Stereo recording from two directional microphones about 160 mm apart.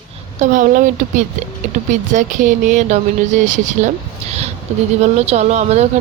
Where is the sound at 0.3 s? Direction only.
55° right (ahead or behind).